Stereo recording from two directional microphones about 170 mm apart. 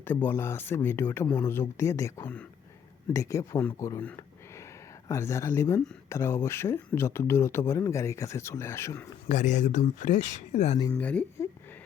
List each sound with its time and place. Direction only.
0.0 s speech: 10° left (ahead or behind)
9.3 s speech: 45° left (ahead or behind)
10.9 s speech: 10° left (ahead or behind)